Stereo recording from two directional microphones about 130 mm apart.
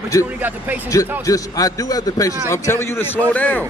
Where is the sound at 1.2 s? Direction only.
25° left (ahead or behind).